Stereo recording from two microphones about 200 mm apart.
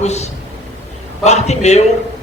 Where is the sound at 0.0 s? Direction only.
35° left (ahead or behind).